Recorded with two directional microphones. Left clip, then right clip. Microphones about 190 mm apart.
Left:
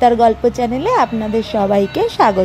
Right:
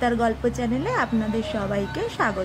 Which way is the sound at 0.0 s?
20° left (ahead or behind).